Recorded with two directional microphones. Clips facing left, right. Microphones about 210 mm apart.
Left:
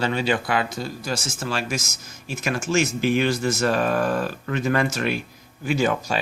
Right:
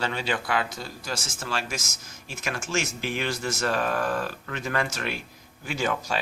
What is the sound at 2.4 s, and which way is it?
Speech, 15° left (ahead or behind).